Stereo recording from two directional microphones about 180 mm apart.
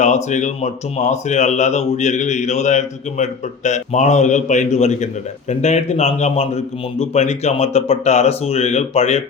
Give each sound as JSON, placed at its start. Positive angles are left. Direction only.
{"t": 0.0, "sound": "speech", "side_deg": 40}